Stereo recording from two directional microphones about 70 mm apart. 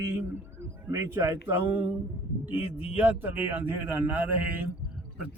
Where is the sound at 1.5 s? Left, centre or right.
Right.